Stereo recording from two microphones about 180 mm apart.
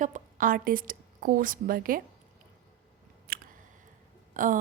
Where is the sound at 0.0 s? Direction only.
45° right (ahead or behind).